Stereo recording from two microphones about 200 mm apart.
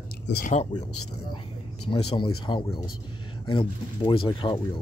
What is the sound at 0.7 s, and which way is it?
Speech, 20° left (ahead or behind).